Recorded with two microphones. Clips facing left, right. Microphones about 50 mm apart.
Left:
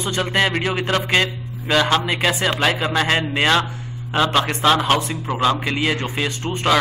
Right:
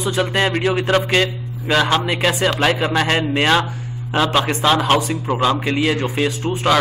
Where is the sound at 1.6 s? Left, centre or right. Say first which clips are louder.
Right 1 dB; centre.